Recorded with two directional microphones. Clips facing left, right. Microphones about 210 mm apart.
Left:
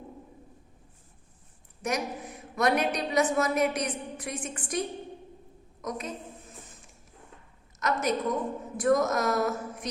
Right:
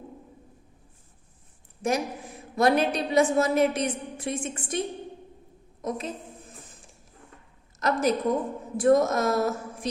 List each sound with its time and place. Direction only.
1.8 s a woman's voice: 30° right (ahead or behind)
7.8 s a woman's voice: 30° right (ahead or behind)